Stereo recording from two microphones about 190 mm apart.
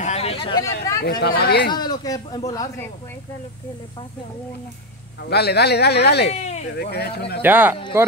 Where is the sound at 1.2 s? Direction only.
55° left (ahead or behind).